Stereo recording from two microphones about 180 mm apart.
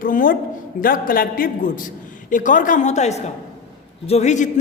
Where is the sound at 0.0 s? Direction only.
50° left (ahead or behind).